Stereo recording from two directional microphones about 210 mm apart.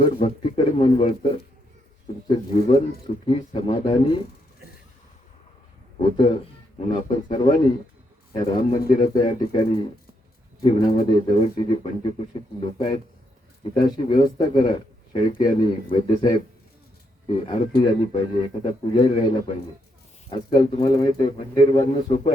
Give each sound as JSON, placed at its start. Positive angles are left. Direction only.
{"t": 0.0, "sound": "speech", "side_deg": 25}
{"t": 6.0, "sound": "speech", "side_deg": 20}